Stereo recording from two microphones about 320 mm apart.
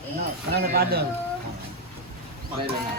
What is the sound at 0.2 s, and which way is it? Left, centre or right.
Speech, right.